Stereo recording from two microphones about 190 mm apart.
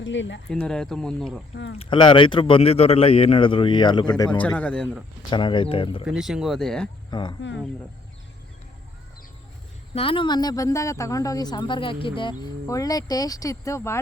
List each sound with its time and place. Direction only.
0.0 s speech: 75° left (ahead or behind)
0.5 s speech: 5° left (ahead or behind)
1.8 s speech: 25° left (ahead or behind)
4.3 s speech: 10° left (ahead or behind)
5.3 s speech: 25° left (ahead or behind)
6.1 s speech: 5° right (ahead or behind)
7.1 s speech: 25° left (ahead or behind)
9.9 s speech: 30° left (ahead or behind)